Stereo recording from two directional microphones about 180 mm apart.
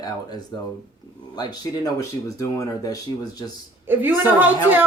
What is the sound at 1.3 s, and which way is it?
Speech, 20° left (ahead or behind).